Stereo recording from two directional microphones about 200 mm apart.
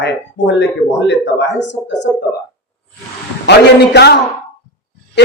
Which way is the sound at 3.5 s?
55° left (ahead or behind).